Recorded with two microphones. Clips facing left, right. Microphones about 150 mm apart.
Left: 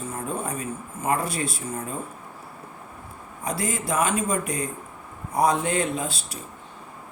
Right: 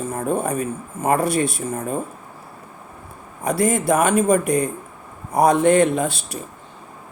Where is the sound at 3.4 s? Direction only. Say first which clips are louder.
Right 9 dB; 60° right (ahead or behind).